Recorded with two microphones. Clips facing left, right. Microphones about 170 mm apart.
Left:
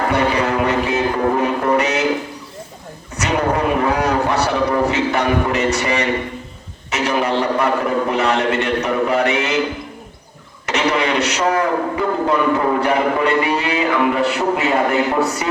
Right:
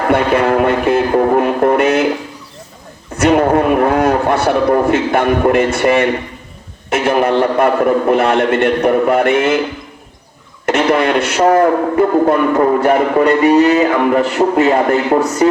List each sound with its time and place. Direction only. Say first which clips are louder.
0.1 s music: right 9 dB; 55° right (ahead or behind)
3.2 s a man's voice: right 7 dB; 55° right (ahead or behind)
10.7 s a man's voice: right 5 dB; 50° right (ahead or behind)